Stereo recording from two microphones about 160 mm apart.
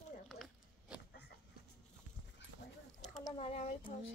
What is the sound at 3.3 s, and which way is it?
Speech, 40° left (ahead or behind).